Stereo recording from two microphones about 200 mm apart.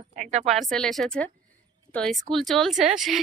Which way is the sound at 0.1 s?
35° right (ahead or behind).